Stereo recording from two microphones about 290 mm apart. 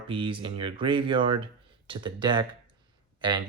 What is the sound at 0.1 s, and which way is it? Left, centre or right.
Speech, centre.